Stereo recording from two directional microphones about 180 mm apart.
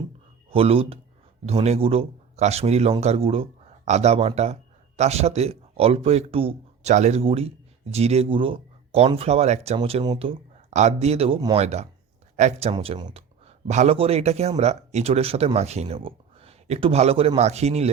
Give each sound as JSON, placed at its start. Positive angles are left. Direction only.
{"t": 0.5, "sound": "speech", "side_deg": -30}